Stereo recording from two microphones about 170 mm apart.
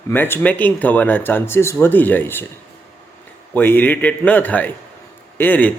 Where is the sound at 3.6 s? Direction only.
10° left (ahead or behind).